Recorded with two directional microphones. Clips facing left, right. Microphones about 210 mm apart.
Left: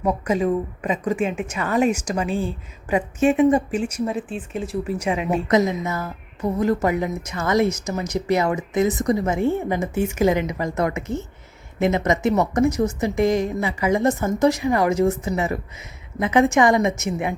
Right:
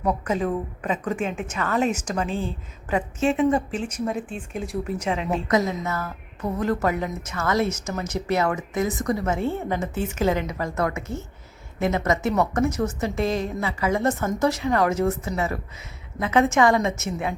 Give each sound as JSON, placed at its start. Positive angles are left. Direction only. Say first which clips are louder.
{"t": 0.0, "sound": "a woman's voice", "louder": "left 3 dB", "side_deg": 10}